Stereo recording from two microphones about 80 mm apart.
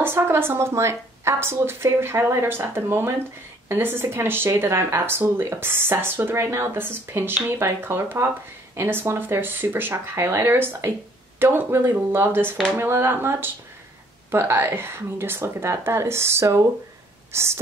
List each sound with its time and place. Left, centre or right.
0.0 s a woman's voice: right